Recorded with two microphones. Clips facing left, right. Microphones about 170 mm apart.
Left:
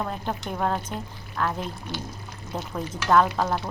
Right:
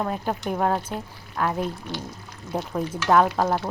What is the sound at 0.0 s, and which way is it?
Frying, 10° right (ahead or behind).